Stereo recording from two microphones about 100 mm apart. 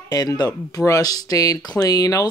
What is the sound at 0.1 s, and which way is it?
Speech, 40° left (ahead or behind).